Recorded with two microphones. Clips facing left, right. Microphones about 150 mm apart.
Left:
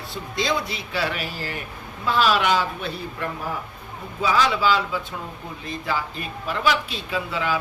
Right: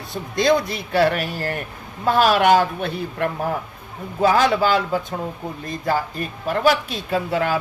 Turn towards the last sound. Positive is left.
turn(degrees=-50)  # may be behind; listen again after turning